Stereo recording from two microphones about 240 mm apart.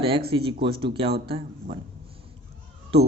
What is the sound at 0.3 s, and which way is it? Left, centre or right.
Speech, right.